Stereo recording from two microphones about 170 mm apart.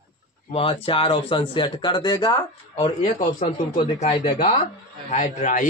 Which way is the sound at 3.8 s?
40° left (ahead or behind).